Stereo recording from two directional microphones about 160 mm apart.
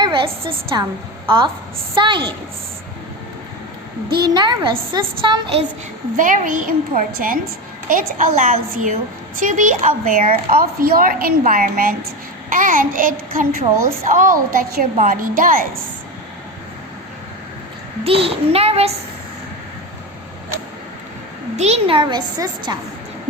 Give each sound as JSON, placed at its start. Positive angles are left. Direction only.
{"t": 0.0, "sound": "a sound", "side_deg": -30}
{"t": 0.7, "sound": "a woman's voice", "side_deg": -25}
{"t": 2.0, "sound": "a child's voice", "side_deg": -30}
{"t": 4.4, "sound": "a woman's voice", "side_deg": -30}
{"t": 6.1, "sound": "a child's voice", "side_deg": -55}
{"t": 18.0, "sound": "a child's voice", "side_deg": -35}
{"t": 21.5, "sound": "a woman's voice", "side_deg": -45}